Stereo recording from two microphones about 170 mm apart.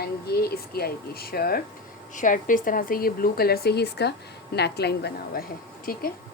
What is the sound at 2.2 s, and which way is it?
A woman's voice, 50° left (ahead or behind).